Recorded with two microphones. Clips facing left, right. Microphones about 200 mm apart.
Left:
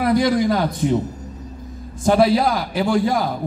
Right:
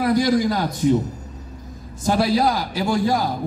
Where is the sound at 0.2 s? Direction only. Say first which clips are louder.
Left 1 dB; 50° left (ahead or behind).